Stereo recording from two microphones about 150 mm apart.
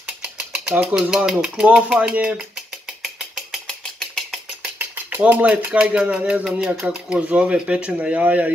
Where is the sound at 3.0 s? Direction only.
5° right (ahead or behind).